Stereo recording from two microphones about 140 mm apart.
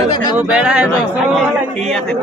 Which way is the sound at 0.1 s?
30° left (ahead or behind).